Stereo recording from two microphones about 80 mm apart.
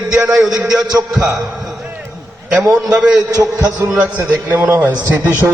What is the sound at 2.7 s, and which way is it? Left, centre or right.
Speech, centre.